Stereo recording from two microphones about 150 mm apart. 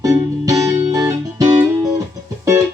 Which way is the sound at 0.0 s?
25° right (ahead or behind).